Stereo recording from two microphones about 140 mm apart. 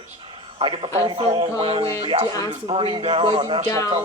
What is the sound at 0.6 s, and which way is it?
Speech, 35° right (ahead or behind).